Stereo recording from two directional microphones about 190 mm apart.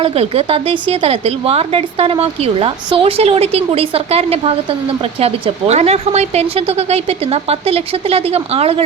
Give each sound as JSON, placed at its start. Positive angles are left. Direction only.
{"t": 0.0, "sound": "a woman's voice", "side_deg": -30}